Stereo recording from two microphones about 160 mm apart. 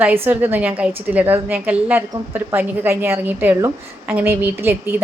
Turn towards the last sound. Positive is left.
turn(degrees=-15)  # may be behind; listen again after turning